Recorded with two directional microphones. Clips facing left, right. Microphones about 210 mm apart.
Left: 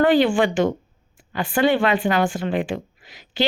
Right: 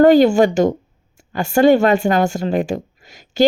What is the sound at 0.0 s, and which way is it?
Speech, 45° right (ahead or behind).